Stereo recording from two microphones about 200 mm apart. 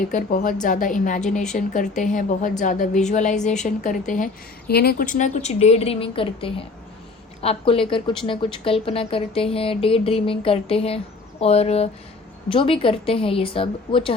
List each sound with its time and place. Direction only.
0.1 s a woman's voice: 40° left (ahead or behind)
4.7 s a woman's voice: 50° left (ahead or behind); by 14.1 s 25° left (ahead or behind)